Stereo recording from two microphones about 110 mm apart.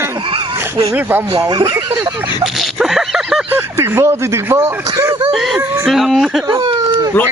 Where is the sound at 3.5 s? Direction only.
20° right (ahead or behind).